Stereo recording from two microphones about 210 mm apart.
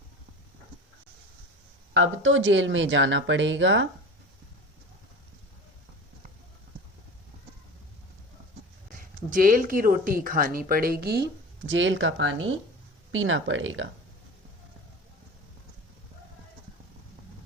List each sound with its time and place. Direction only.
1.9 s speech: 65° right (ahead or behind)
8.9 s speech: 40° right (ahead or behind); by 13.8 s 65° right (ahead or behind)